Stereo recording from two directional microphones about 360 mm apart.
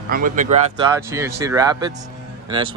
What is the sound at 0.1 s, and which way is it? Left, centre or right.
Speech, right.